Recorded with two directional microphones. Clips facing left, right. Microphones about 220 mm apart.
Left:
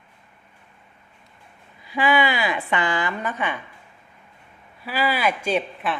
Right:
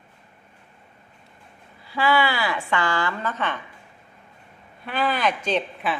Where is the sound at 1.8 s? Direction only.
15° left (ahead or behind).